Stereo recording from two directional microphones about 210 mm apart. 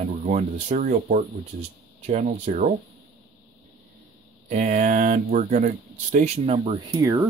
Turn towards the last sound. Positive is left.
turn(degrees=-15)  # may be behind; listen again after turning